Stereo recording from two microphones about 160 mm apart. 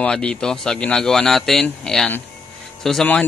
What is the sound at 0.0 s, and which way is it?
Speech, 5° left (ahead or behind).